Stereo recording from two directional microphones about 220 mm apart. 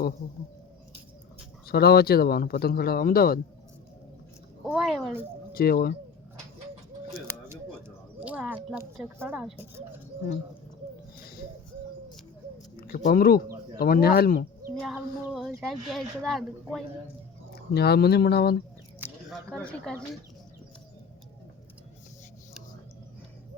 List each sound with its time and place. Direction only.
1.6 s speech: 45° left (ahead or behind)
4.6 s speech: centre (ahead or behind)
5.5 s speech: 45° left (ahead or behind)
7.3 s a sound: 10° right (ahead or behind)
12.9 s speech: 40° left (ahead or behind)
14.8 s speech: centre (ahead or behind)
17.5 s speech: 45° left (ahead or behind)
18.9 s a sound: 10° right (ahead or behind)
19.5 s speech: 5° left (ahead or behind)